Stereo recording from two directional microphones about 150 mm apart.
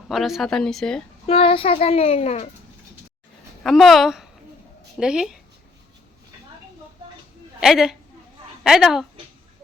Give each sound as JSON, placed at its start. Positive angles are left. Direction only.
{"t": 0.1, "sound": "speech", "side_deg": 0}
{"t": 1.3, "sound": "a child's voice", "side_deg": 40}
{"t": 3.6, "sound": "speech", "side_deg": 0}
{"t": 7.6, "sound": "speech", "side_deg": -5}